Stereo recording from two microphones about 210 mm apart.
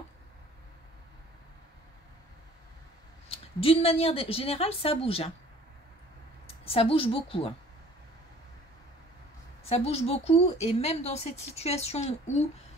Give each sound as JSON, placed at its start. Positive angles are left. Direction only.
{"t": 3.3, "sound": "a woman's voice", "side_deg": 25}
{"t": 6.4, "sound": "a woman's voice", "side_deg": 25}
{"t": 9.7, "sound": "a woman's voice", "side_deg": 30}